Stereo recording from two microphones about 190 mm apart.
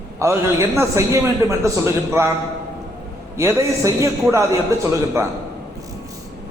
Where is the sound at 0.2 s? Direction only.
15° right (ahead or behind).